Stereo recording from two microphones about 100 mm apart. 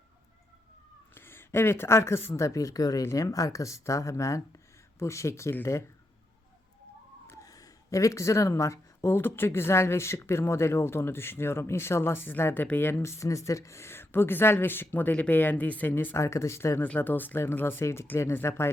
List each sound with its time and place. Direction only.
1.1 s speech: 25° left (ahead or behind)
7.4 s speech: 35° left (ahead or behind)